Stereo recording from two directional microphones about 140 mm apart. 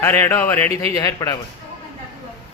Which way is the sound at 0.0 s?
20° left (ahead or behind).